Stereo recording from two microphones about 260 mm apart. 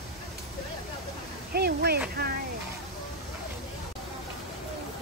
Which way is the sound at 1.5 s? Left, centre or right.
Right.